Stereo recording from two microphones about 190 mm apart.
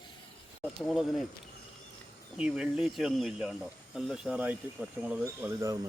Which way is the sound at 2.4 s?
5° right (ahead or behind).